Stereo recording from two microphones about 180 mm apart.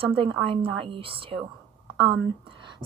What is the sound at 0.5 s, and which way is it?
A woman's voice, 30° right (ahead or behind).